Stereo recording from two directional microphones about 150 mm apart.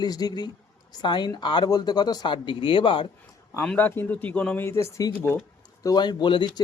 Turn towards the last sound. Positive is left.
turn(degrees=30)  # may be behind; listen again after turning